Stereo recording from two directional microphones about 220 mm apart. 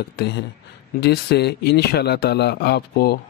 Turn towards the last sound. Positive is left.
turn(degrees=45)  # may be behind; listen again after turning